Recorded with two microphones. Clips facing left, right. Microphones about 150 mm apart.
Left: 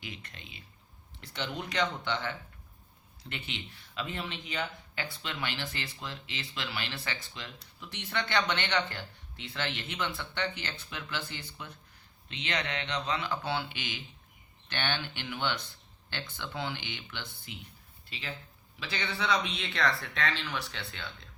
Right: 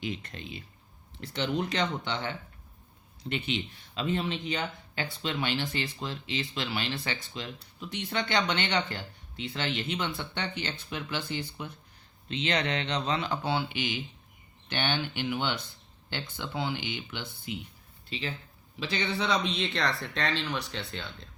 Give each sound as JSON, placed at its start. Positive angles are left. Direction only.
{"t": 0.2, "sound": "speech", "side_deg": -40}
{"t": 1.4, "sound": "speech", "side_deg": -30}
{"t": 12.3, "sound": "speech", "side_deg": -30}
{"t": 18.1, "sound": "speech", "side_deg": -25}